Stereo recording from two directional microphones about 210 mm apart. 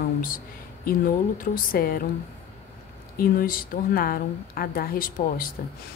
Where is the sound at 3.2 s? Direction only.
45° left (ahead or behind).